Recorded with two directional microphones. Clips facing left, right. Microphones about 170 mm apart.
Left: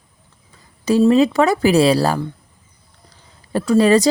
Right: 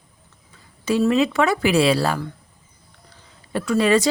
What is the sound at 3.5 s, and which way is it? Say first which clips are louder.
Speech: left 5 dB; 35° left (ahead or behind).